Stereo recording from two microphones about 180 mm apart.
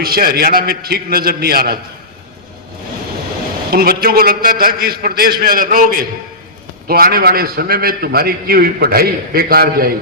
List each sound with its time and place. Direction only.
0.0 s a man's voice: 55° right (ahead or behind)
3.7 s a man's voice: 55° right (ahead or behind)